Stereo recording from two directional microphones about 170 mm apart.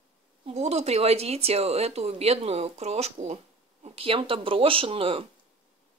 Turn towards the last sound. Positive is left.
turn(degrees=-30)  # may be behind; listen again after turning